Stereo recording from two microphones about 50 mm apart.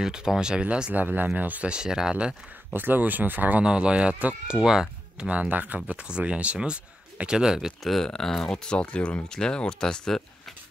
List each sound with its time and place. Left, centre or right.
0.0 s speech: centre
0.9 s speech: right
1.7 s speech: centre
2.7 s speech: right
3.6 s speech: right
4.6 s speech: centre
5.3 s speech: right
5.9 s speech: right
7.8 s speech: centre